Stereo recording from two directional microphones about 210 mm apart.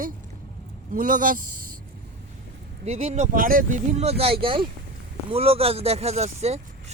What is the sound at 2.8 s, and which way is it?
Speech, 30° right (ahead or behind).